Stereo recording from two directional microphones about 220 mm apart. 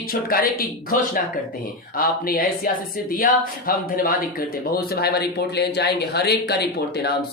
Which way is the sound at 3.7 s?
40° left (ahead or behind).